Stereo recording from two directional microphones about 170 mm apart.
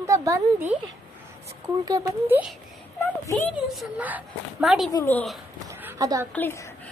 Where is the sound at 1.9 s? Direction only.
20° right (ahead or behind).